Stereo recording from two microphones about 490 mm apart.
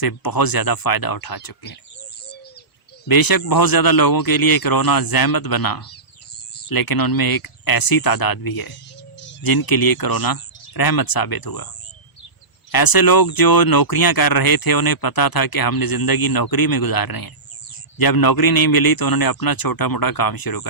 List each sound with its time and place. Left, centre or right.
0.0 s speech: left
3.1 s speech: left
12.7 s speech: left